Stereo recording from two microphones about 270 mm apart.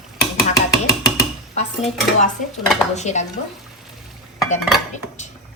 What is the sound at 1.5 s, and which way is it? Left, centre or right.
A woman's voice, left.